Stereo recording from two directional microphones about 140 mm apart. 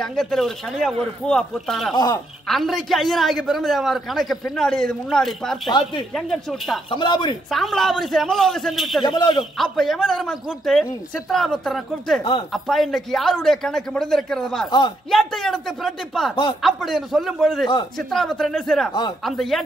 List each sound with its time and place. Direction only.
0.0 s a man's voice: 5° left (ahead or behind)
5.7 s speech: 30° left (ahead or behind)
6.1 s a man's voice: centre (ahead or behind)
6.9 s speech: 35° left (ahead or behind)
7.4 s a man's voice: centre (ahead or behind)
9.0 s speech: 35° left (ahead or behind)
9.4 s a man's voice: centre (ahead or behind)
12.2 s speech: 35° left (ahead or behind)
12.5 s a man's voice: centre (ahead or behind)